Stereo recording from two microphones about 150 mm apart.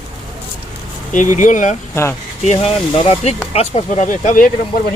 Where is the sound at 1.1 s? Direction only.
60° left (ahead or behind).